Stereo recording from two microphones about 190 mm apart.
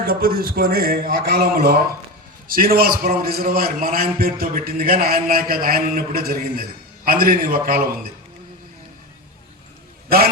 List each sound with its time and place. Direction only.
0.0 s a man's voice: 50° right (ahead or behind)